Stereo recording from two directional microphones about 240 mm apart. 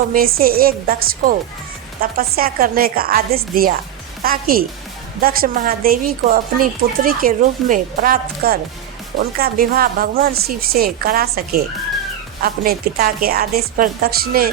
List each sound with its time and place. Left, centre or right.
0.1 s speech: right